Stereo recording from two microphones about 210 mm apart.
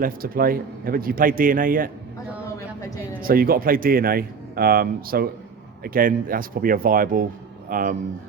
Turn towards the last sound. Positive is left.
turn(degrees=-40)  # may be behind; listen again after turning